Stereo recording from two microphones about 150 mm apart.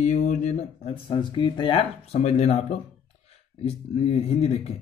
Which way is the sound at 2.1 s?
45° left (ahead or behind).